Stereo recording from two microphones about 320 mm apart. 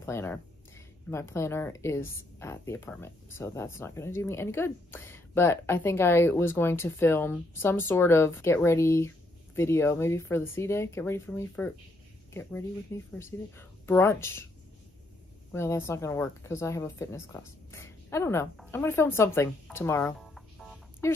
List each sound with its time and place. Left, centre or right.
0.0 s speech: centre
15.5 s speech: centre